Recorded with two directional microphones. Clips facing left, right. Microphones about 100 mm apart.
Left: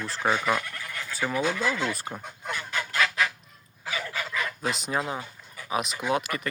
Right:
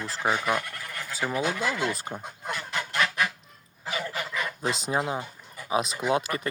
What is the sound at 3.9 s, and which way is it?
Dog, 25° right (ahead or behind).